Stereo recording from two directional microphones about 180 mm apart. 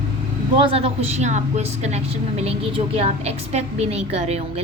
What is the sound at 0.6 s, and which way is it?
A woman's voice, 30° right (ahead or behind).